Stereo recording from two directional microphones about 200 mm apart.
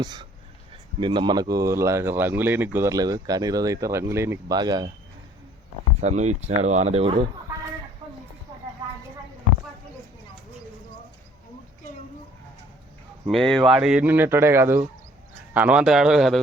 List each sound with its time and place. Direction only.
0.0 s speech: 20° right (ahead or behind)
6.0 s speech: 35° right (ahead or behind)
8.0 s a sound: 25° right (ahead or behind)
13.2 s a man's voice: centre (ahead or behind)